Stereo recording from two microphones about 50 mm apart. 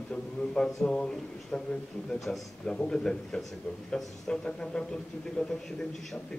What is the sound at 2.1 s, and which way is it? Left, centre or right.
Speech, centre.